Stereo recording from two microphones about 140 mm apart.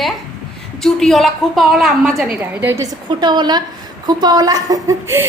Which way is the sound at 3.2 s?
30° right (ahead or behind).